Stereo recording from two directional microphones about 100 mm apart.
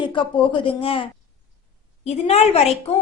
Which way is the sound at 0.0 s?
55° left (ahead or behind).